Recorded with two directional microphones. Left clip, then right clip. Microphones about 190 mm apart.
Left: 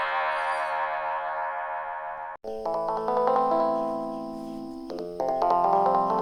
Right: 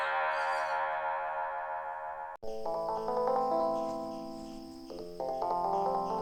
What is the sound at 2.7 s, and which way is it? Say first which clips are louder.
Music: left 7 dB; 50° left (ahead or behind).